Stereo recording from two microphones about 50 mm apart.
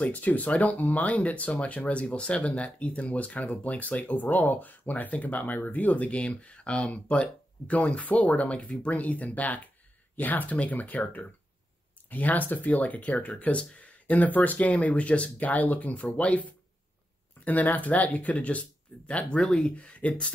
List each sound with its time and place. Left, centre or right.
0.0 s speech: left
17.5 s speech: left; by 19.7 s centre
19.7 s speech: left